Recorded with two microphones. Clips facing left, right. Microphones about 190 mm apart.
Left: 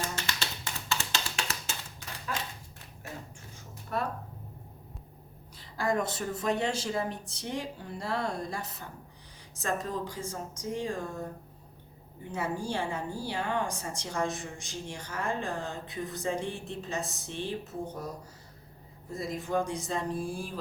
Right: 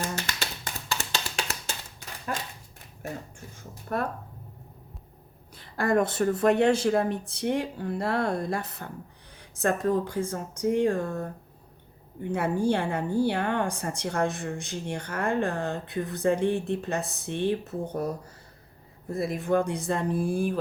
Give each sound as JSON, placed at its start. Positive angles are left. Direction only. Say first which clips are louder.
{"t": 0.3, "sound": "tap", "louder": "right 2 dB", "side_deg": -40}
{"t": 3.9, "sound": "speech", "louder": "right 4 dB", "side_deg": -50}
{"t": 5.5, "sound": "a woman's voice", "louder": "right 6 dB", "side_deg": -60}
{"t": 12.3, "sound": "a woman's voice", "louder": "right 8 dB", "side_deg": -60}
{"t": 19.1, "sound": "a woman's voice", "louder": "right 6 dB", "side_deg": -60}